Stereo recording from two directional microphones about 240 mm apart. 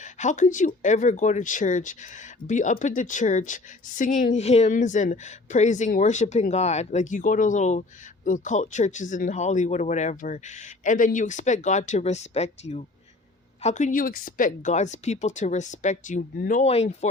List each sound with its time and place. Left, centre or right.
0.0 s speech: left